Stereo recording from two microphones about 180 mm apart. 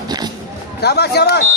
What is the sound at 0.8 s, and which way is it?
Speech, 65° left (ahead or behind).